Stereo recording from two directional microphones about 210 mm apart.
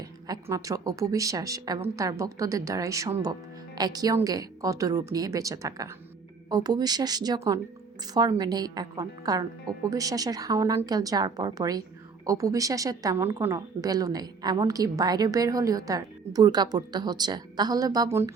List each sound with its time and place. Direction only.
0.3 s speech: 15° right (ahead or behind)